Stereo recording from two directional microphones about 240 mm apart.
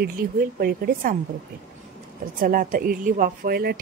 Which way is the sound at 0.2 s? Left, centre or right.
Right.